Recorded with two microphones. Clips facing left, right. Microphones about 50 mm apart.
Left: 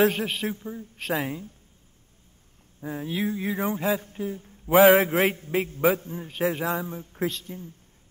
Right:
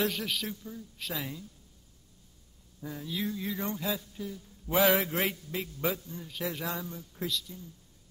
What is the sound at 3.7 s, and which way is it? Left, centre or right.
Speech, left.